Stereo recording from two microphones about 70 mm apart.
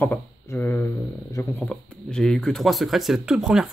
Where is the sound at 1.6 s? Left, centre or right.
Centre.